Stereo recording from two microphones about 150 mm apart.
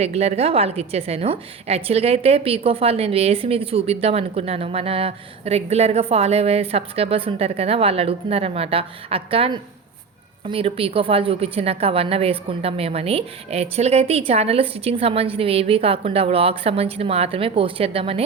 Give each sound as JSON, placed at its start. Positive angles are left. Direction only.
{"t": 0.0, "sound": "a woman's voice", "side_deg": -45}